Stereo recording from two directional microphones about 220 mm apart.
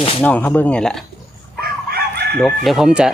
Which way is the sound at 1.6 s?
45° right (ahead or behind).